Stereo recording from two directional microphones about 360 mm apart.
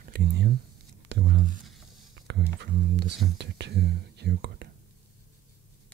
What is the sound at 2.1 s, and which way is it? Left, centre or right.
Speech, right.